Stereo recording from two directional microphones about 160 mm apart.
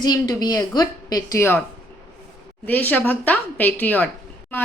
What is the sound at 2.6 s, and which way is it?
A woman's voice, 10° left (ahead or behind).